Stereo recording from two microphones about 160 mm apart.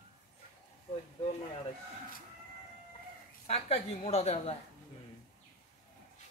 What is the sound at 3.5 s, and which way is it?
Speech, 40° left (ahead or behind).